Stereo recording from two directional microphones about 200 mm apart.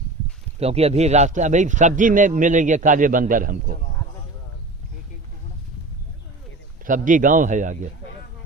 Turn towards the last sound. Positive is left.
turn(degrees=-40)  # may be behind; listen again after turning